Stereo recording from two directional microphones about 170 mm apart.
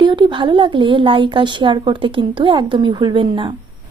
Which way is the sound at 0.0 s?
25° right (ahead or behind).